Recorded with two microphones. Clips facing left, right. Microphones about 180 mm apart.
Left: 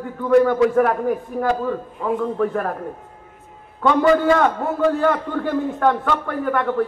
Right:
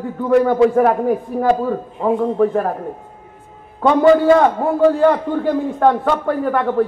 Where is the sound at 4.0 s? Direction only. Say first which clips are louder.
Right 5 dB; 30° right (ahead or behind).